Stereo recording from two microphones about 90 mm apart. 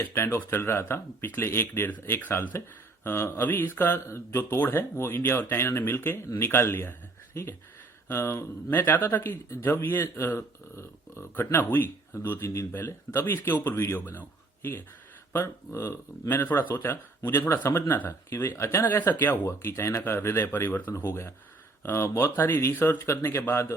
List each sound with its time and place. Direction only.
0.1 s speech: 30° left (ahead or behind)
8.0 s speech: 30° left (ahead or behind)